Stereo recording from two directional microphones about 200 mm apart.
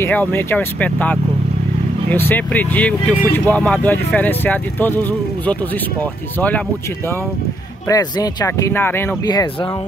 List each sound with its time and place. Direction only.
0.0 s speech: 10° left (ahead or behind)
7.9 s speech: 20° left (ahead or behind)